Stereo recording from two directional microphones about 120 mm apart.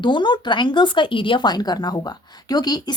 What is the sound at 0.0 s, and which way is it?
A woman's voice, 40° left (ahead or behind).